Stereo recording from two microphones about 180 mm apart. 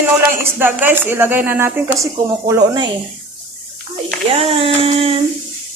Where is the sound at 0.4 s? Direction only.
10° right (ahead or behind).